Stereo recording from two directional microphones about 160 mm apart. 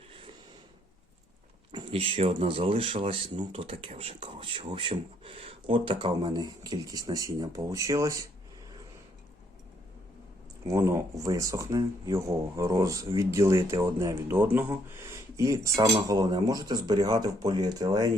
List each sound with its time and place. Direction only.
1.7 s speech: 35° right (ahead or behind)
10.7 s speech: 20° right (ahead or behind)